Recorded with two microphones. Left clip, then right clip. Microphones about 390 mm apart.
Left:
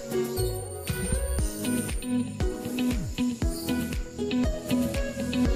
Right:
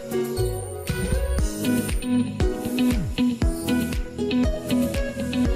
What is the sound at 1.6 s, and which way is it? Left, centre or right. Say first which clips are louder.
Music: right 6 dB; right.